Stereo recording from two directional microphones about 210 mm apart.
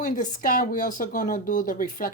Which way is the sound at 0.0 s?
40° left (ahead or behind).